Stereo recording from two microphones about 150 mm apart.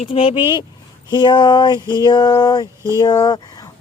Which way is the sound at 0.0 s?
40° left (ahead or behind).